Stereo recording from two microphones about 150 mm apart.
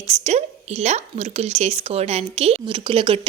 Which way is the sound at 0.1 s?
50° right (ahead or behind).